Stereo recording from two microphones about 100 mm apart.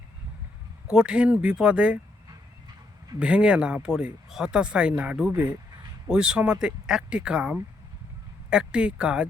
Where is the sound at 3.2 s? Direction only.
10° right (ahead or behind).